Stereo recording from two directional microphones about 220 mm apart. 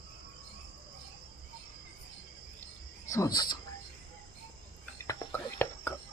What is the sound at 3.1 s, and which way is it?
Speech, 15° left (ahead or behind).